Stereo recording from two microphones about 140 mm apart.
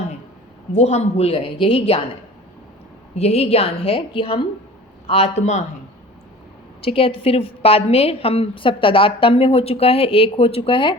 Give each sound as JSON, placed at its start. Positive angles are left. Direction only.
{"t": 0.7, "sound": "a woman's voice", "side_deg": 55}
{"t": 3.2, "sound": "a woman's voice", "side_deg": 45}
{"t": 6.8, "sound": "a woman's voice", "side_deg": 40}